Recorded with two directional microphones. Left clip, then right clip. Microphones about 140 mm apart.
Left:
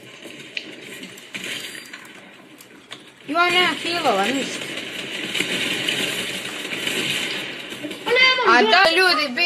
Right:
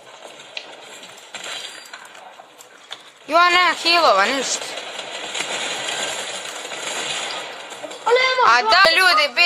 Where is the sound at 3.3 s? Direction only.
85° right.